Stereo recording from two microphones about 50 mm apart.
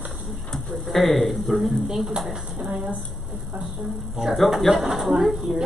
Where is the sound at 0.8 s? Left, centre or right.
Centre.